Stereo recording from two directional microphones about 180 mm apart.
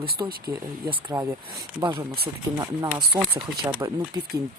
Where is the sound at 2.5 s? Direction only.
25° right (ahead or behind).